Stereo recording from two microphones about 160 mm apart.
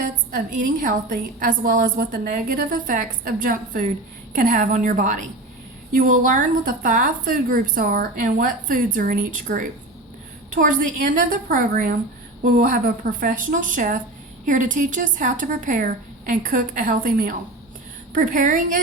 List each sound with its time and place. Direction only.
0.3 s a woman's voice: 55° right (ahead or behind)